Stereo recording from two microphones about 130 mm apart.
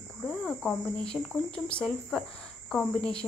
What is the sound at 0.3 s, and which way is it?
Cricket, 5° left (ahead or behind).